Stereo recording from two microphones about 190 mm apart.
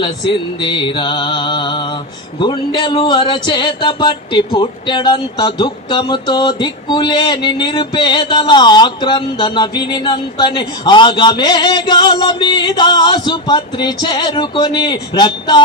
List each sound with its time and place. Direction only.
0.6 s speech: 25° left (ahead or behind)